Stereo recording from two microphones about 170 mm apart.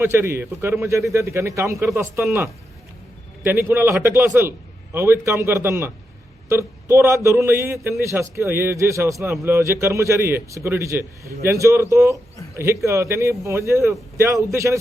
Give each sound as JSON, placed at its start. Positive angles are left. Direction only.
{"t": 0.0, "sound": "a man's voice", "side_deg": -15}
{"t": 3.4, "sound": "a man's voice", "side_deg": -10}